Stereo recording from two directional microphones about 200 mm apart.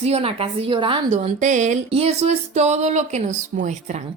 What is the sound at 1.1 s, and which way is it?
A woman's voice, 35° right (ahead or behind).